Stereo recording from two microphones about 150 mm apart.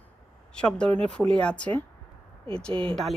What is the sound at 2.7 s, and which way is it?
Speech, 35° right (ahead or behind).